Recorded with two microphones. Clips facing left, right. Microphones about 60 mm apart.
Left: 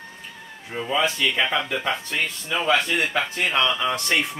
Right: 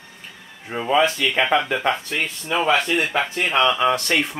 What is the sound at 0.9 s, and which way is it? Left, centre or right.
Speech, right.